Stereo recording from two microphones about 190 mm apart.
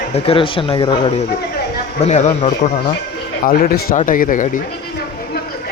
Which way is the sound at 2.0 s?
35° left (ahead or behind).